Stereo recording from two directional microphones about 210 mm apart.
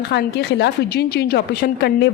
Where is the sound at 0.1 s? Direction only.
55° left (ahead or behind).